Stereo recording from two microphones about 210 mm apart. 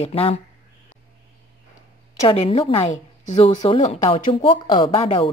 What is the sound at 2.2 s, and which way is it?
A woman's voice, 25° left (ahead or behind).